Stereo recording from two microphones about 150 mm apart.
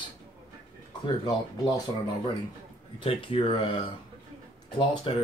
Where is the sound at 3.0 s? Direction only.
35° left (ahead or behind).